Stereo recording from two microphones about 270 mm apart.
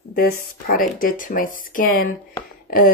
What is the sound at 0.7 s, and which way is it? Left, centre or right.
Speech, left.